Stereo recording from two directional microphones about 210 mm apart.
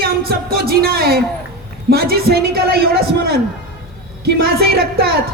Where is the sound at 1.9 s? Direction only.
45° right (ahead or behind).